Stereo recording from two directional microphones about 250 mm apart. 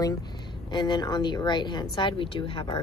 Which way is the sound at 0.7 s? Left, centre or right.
Centre.